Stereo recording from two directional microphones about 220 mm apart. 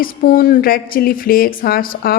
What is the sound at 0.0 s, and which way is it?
Speech, 40° left (ahead or behind).